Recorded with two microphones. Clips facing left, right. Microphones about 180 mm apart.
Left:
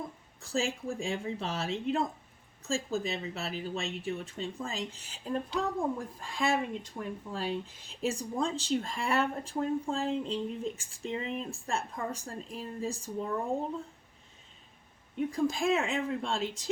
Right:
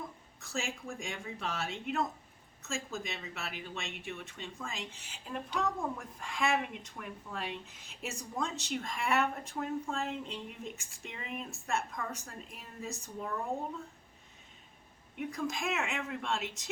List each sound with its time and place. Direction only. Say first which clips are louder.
0.4 s speech: left 7 dB; 35° left (ahead or behind)
15.2 s speech: left 7 dB; 30° left (ahead or behind)